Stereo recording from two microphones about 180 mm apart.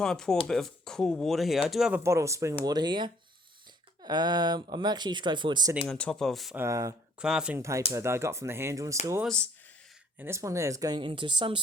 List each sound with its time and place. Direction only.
0.0 s speech: 5° left (ahead or behind)
2.0 s speech: 15° right (ahead or behind)
5.9 s speech: 5° left (ahead or behind)
6.6 s speech: 20° right (ahead or behind)
7.2 s speech: 5° right (ahead or behind)
9.2 s speech: 5° left (ahead or behind)
10.2 s speech: 15° right (ahead or behind)